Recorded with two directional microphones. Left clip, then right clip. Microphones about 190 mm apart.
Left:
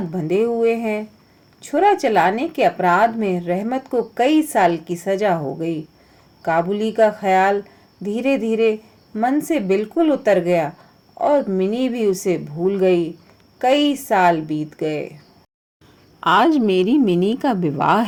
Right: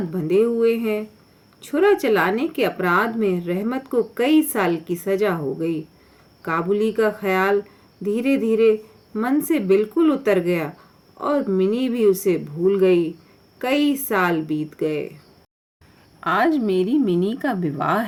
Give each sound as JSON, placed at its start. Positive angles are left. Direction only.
{"t": 0.3, "sound": "a woman's voice", "side_deg": 20}
{"t": 16.2, "sound": "a woman's voice", "side_deg": 30}